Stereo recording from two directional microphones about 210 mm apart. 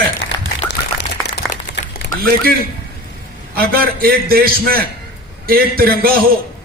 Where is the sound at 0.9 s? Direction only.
50° left (ahead or behind).